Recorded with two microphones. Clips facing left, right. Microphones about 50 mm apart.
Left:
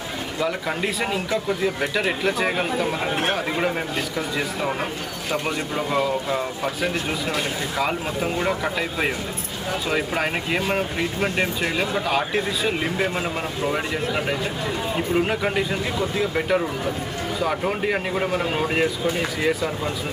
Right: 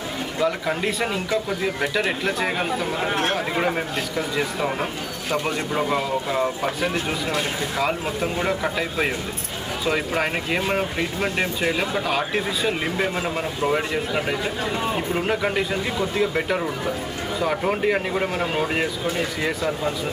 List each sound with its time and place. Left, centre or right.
0.4 s speech: centre